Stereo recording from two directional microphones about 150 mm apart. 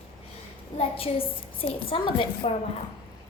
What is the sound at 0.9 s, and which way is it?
A woman's voice, 40° left (ahead or behind).